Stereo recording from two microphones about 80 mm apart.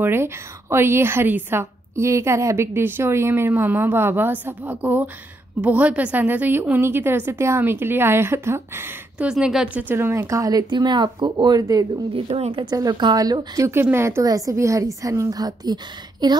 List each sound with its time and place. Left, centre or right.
0.0 s a woman's voice: right
9.2 s a woman's voice: centre
9.8 s speech: right
10.7 s speech: right
11.2 s a woman's voice: right
12.2 s speech: right
12.7 s a woman's voice: right
13.6 s speech: right
14.2 s a woman's voice: right